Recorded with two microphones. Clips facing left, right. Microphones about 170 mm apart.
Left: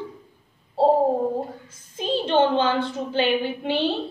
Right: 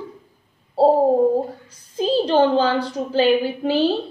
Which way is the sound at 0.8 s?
35° right (ahead or behind).